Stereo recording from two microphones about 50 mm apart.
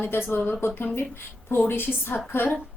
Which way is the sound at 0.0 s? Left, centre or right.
Left.